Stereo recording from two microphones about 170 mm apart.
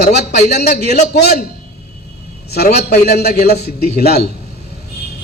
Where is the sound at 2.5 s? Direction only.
70° left (ahead or behind).